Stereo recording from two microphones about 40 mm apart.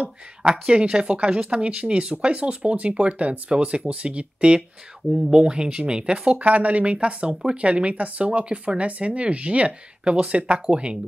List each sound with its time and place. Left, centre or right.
0.5 s speech: right
5.1 s speech: centre
5.4 s speech: right
6.3 s speech: right